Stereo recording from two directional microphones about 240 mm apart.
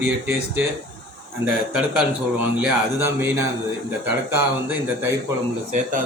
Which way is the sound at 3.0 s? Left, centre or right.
Centre.